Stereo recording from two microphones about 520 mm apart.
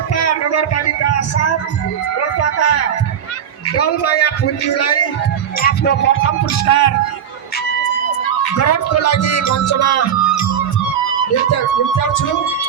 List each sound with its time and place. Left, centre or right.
0.1 s a sound: left
2.4 s music: left
3.7 s speech: left
8.2 s speech: left
11.5 s music: left